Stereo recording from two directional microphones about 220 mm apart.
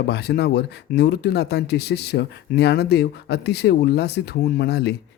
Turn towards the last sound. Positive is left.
turn(degrees=45)  # may be behind; listen again after turning